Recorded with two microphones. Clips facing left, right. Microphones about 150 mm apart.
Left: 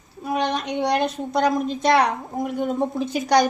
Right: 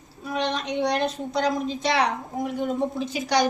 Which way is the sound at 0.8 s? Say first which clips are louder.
Left 2 dB; 50° left (ahead or behind).